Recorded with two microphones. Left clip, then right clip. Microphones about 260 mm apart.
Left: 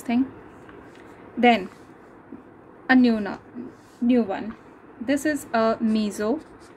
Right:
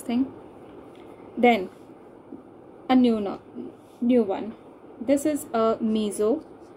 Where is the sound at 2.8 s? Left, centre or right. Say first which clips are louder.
Left 2 dB; left.